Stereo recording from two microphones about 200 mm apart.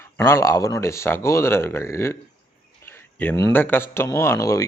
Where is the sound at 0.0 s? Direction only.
15° left (ahead or behind).